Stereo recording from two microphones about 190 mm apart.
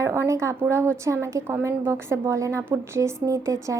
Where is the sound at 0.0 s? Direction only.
15° right (ahead or behind).